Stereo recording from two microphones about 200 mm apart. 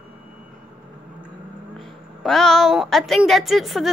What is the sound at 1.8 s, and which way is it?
A woman's voice, centre (ahead or behind).